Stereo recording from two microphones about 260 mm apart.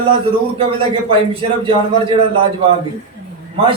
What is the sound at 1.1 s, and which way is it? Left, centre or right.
A man's voice, right.